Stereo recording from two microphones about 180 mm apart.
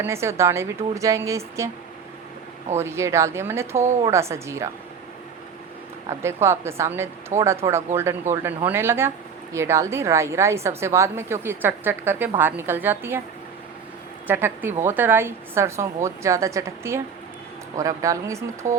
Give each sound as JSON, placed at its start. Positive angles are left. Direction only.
{"t": 0.0, "sound": "speech", "side_deg": -15}
{"t": 2.7, "sound": "speech", "side_deg": -15}
{"t": 6.1, "sound": "speech", "side_deg": -15}
{"t": 14.3, "sound": "speech", "side_deg": -10}